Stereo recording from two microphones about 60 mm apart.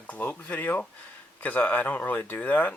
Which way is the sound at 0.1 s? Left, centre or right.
Left.